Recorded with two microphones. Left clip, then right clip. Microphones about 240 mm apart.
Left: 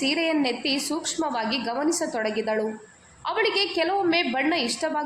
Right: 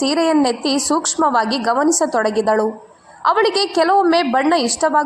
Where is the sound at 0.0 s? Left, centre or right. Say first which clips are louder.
Right 8 dB; right.